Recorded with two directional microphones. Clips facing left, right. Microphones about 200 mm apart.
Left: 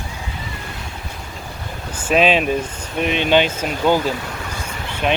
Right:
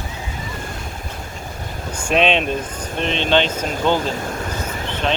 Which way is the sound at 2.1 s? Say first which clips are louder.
Left 2 dB; 5° left (ahead or behind).